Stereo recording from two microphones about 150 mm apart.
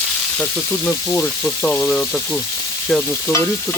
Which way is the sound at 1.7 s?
15° left (ahead or behind).